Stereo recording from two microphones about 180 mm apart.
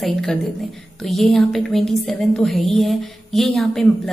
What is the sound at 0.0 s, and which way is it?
A woman's voice, 5° left (ahead or behind).